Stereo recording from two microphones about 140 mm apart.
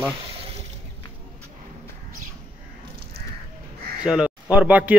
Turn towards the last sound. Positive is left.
turn(degrees=-10)  # may be behind; listen again after turning